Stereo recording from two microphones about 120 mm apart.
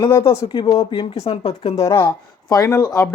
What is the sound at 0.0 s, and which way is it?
Speech, 35° left (ahead or behind).